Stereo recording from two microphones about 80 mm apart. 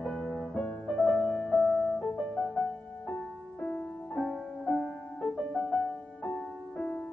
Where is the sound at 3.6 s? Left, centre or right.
Centre.